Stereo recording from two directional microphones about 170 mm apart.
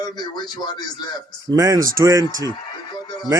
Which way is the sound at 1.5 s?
20° right (ahead or behind).